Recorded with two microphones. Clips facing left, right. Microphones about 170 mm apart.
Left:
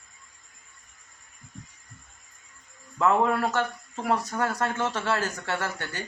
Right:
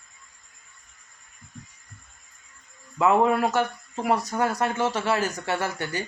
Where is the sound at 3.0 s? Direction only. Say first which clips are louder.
Right 3 dB; 10° right (ahead or behind).